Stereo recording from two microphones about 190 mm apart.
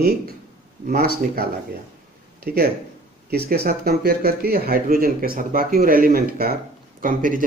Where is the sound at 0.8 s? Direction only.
55° right (ahead or behind).